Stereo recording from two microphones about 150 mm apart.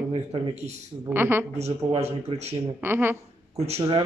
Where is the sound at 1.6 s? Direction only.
45° right (ahead or behind).